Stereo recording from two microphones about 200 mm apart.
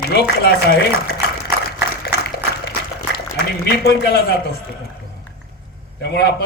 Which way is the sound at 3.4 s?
50° left (ahead or behind).